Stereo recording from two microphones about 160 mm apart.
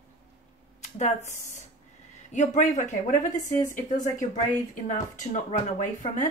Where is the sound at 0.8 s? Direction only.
45° left (ahead or behind).